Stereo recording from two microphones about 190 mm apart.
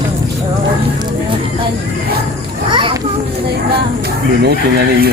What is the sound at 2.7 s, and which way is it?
Children playing, 25° right (ahead or behind).